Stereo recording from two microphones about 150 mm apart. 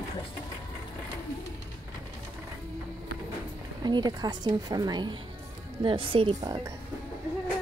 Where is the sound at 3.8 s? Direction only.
30° right (ahead or behind).